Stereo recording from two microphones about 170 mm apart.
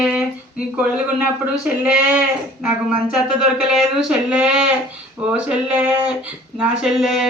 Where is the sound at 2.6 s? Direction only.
5° right (ahead or behind).